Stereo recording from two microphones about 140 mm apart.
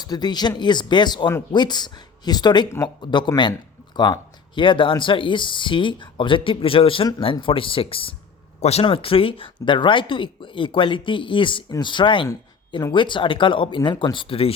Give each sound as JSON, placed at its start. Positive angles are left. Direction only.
{"t": 0.0, "sound": "speech", "side_deg": 30}